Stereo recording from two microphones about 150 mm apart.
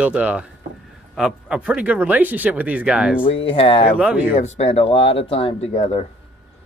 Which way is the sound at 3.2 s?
35° left (ahead or behind).